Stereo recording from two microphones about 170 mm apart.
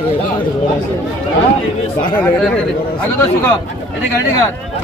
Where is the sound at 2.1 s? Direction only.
5° left (ahead or behind).